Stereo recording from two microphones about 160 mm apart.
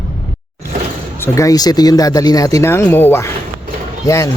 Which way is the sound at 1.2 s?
20° left (ahead or behind).